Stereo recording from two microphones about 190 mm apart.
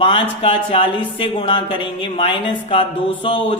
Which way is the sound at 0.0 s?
25° left (ahead or behind).